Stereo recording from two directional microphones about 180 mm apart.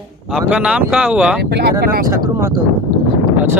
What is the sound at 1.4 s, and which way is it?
Speech, 70° right (ahead or behind).